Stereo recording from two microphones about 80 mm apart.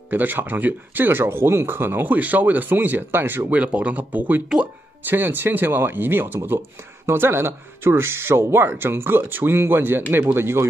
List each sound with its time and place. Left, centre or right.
0.1 s speech: right